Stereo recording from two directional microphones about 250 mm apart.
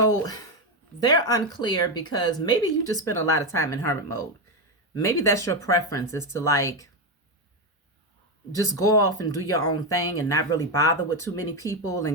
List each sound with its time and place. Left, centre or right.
0.0 s a sound: centre
0.9 s speech: centre
8.6 s speech: centre